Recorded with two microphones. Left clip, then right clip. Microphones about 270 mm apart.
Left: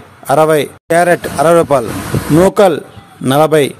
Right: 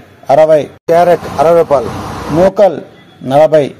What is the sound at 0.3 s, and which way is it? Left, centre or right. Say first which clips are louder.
Speech: right 3 dB; left.